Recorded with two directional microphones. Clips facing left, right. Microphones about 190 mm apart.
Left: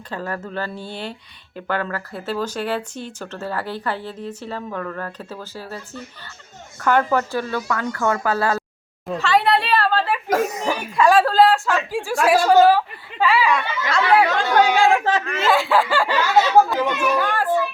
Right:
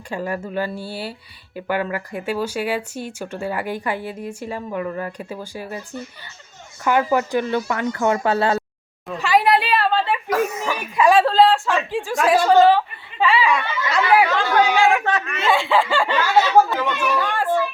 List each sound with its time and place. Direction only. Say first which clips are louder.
0.1 s speech: right 3 dB; 10° right (ahead or behind)
9.2 s speech: right 1 dB; 10° right (ahead or behind)
9.6 s speech: even; centre (ahead or behind)
10.2 s speech: left 1 dB; 40° left (ahead or behind)
10.9 s speech: even; 5° right (ahead or behind)
11.2 s speech: even; 5° left (ahead or behind)
14.8 s speech: left 1 dB; 30° left (ahead or behind)
15.4 s speech: even; 5° left (ahead or behind)
17.2 s chatter: left 1 dB; 5° left (ahead or behind)